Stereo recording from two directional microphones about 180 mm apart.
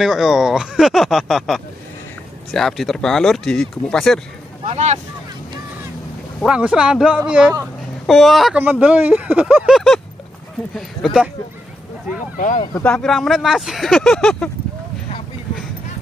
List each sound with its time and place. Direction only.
0.0 s speech: centre (ahead or behind)
4.6 s speech: 35° right (ahead or behind)
6.4 s speech: 5° right (ahead or behind)
12.4 s speech: 45° left (ahead or behind)
12.8 s speech: 5° left (ahead or behind)